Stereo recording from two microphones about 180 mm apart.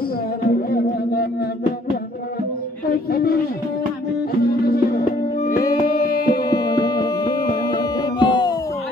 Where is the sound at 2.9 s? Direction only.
55° left (ahead or behind).